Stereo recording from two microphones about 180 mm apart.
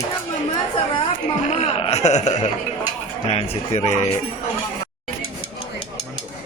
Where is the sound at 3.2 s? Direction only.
35° left (ahead or behind).